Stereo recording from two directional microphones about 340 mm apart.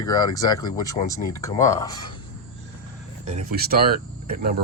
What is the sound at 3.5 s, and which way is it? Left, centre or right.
Speech, right.